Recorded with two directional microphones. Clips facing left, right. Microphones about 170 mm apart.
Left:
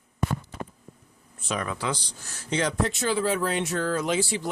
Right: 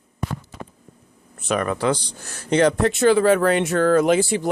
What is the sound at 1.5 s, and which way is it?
Speech, 60° right (ahead or behind).